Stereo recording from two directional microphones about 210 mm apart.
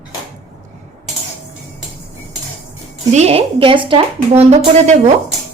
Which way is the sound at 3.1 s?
30° right (ahead or behind).